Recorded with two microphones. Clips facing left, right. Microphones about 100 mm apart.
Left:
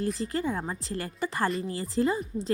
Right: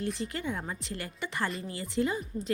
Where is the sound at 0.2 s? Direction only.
35° left (ahead or behind).